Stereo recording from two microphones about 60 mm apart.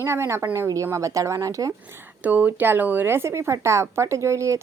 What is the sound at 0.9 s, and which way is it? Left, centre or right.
Speech, right.